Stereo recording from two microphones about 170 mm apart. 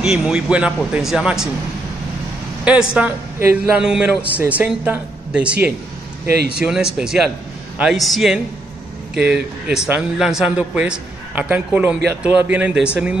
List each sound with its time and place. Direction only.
0.0 s a man's voice: 5° right (ahead or behind)
2.6 s a man's voice: 5° right (ahead or behind)
6.2 s speech: 70° right (ahead or behind)
6.6 s a man's voice: 5° right (ahead or behind)